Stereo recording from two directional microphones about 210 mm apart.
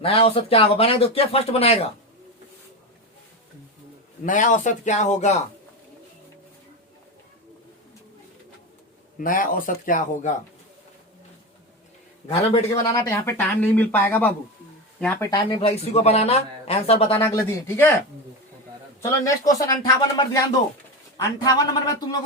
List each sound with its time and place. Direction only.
0.0 s speech: 25° left (ahead or behind)
4.3 s speech: 35° left (ahead or behind)
9.1 s speech: 40° left (ahead or behind)
12.3 s speech: 25° left (ahead or behind)
12.8 s speech: 15° left (ahead or behind)
15.4 s speech: 25° left (ahead or behind)
17.2 s speech: 10° left (ahead or behind)
19.0 s speech: 15° left (ahead or behind)